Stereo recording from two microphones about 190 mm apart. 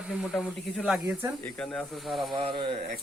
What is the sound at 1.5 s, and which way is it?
Speech, 5° left (ahead or behind).